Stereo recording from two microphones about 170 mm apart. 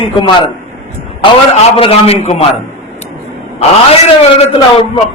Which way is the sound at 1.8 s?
35° left (ahead or behind).